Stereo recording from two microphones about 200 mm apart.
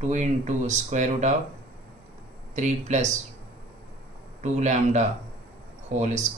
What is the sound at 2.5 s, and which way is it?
Speech, 35° right (ahead or behind).